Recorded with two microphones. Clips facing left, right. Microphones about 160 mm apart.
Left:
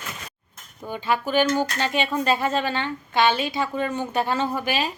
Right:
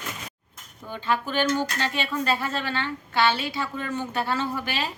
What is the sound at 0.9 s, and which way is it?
Speech, 10° left (ahead or behind).